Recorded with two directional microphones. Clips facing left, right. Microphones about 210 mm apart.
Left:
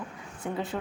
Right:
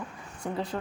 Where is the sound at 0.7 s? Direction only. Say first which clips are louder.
Even; 5° left (ahead or behind).